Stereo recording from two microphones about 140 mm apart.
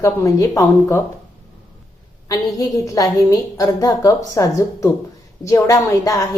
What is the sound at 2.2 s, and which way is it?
A woman's voice, 25° left (ahead or behind).